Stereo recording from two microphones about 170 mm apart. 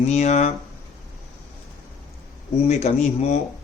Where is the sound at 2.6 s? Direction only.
40° left (ahead or behind).